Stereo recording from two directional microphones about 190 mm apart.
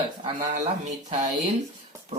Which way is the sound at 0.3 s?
40° right (ahead or behind).